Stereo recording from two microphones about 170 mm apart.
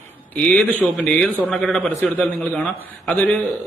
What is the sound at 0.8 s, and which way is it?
A man's voice, 5° left (ahead or behind).